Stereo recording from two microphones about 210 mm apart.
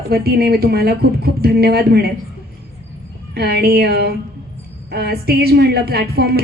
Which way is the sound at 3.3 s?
50° right (ahead or behind).